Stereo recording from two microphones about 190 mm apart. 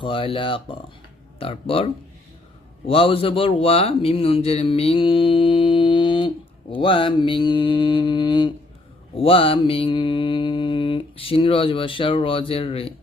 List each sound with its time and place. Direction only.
0.0 s a man's voice: 30° left (ahead or behind)